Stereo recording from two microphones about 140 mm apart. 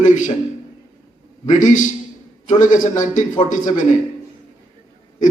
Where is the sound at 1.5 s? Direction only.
65° left (ahead or behind).